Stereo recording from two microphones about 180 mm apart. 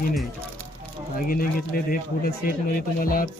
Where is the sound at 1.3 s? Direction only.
50° left (ahead or behind).